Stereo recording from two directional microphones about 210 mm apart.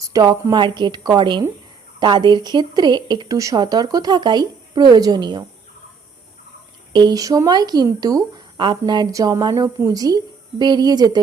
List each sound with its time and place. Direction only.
0.0 s speech: 15° right (ahead or behind)
6.9 s speech: 20° right (ahead or behind)